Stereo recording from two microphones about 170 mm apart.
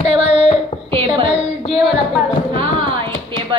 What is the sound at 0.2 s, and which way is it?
Child singing, 40° left (ahead or behind).